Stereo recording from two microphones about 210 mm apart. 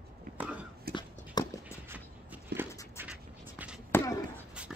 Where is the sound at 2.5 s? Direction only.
50° right (ahead or behind).